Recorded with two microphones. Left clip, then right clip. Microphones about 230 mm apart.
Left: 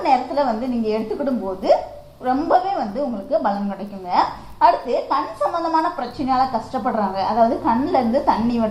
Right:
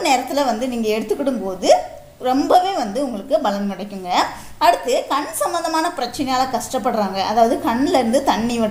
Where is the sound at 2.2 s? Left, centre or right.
Right.